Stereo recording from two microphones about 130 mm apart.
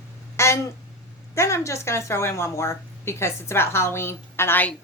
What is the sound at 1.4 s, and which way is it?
A woman's voice, 20° left (ahead or behind).